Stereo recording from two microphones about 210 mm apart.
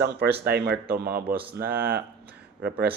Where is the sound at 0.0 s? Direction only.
50° right (ahead or behind).